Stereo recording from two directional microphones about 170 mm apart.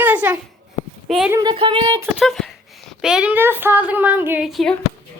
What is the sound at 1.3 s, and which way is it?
Speech, 20° right (ahead or behind).